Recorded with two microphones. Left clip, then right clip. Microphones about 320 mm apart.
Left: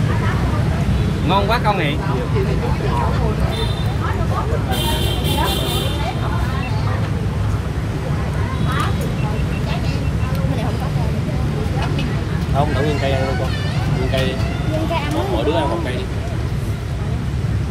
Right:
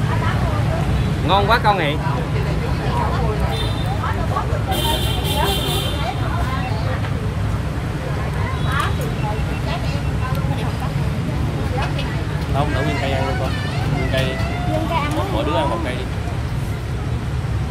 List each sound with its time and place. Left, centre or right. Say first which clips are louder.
1.3 s speech: right 2 dB; right